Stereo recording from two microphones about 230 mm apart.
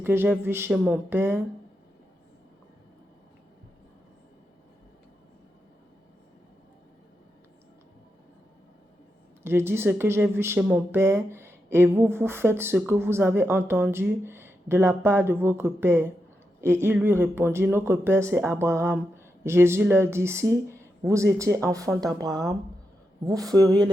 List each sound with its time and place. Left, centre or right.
0.0 s a woman's voice: centre
9.4 s a woman's voice: centre